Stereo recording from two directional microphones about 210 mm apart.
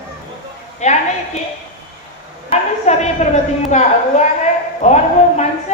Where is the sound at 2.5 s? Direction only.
35° left (ahead or behind).